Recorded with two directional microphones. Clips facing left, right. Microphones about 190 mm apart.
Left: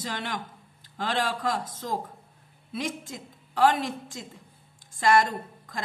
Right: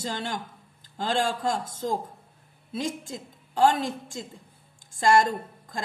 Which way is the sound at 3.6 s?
25° right (ahead or behind).